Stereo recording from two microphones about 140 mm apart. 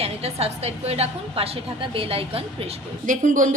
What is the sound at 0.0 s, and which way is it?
A woman's voice, 45° right (ahead or behind).